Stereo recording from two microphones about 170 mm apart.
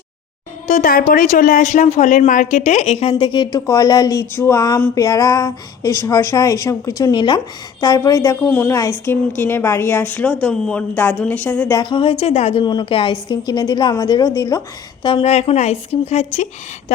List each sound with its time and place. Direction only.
0.7 s a woman's voice: 55° left (ahead or behind); by 8.4 s 20° left (ahead or behind)
8.4 s a woman's voice: 10° left (ahead or behind)
11.8 s speech: 30° left (ahead or behind)
15.0 s a woman's voice: 35° left (ahead or behind)